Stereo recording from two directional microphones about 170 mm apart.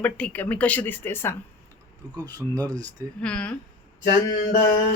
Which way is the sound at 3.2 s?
5° left (ahead or behind).